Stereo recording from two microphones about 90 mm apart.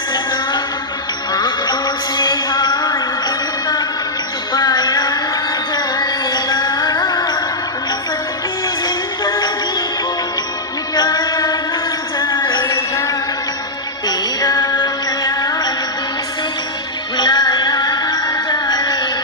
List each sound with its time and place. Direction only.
1.3 s music: 50° left (ahead or behind)
9.2 s music: 50° left (ahead or behind)
10.9 s music: 55° left (ahead or behind)
12.2 s a sound: 60° left (ahead or behind)
12.6 s a sound: 30° left (ahead or behind)
14.1 s music: 50° left (ahead or behind)
15.2 s music: 40° left (ahead or behind)
17.2 s music: 55° left (ahead or behind)